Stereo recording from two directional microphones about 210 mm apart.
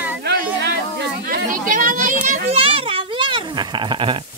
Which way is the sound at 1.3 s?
40° right (ahead or behind).